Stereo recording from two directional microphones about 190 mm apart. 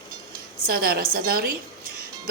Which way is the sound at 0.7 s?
50° right (ahead or behind).